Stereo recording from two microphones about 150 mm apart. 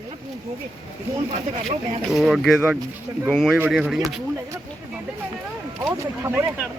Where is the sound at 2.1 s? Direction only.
Centre (ahead or behind).